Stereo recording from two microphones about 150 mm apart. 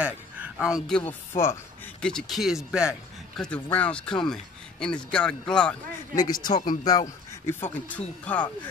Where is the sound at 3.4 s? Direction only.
10° left (ahead or behind).